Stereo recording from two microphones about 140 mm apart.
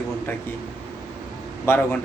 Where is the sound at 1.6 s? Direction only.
15° left (ahead or behind).